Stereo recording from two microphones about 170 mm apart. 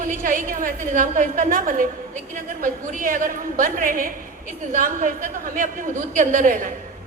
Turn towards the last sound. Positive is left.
turn(degrees=-50)  # may be behind; listen again after turning